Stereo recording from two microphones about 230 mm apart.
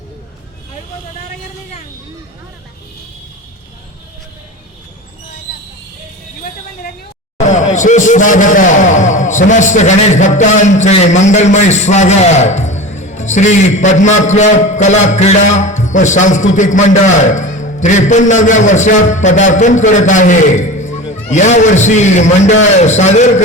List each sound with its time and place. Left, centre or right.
7.5 s a man's voice: left